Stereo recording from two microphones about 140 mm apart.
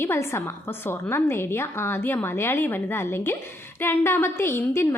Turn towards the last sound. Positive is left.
turn(degrees=15)  # may be behind; listen again after turning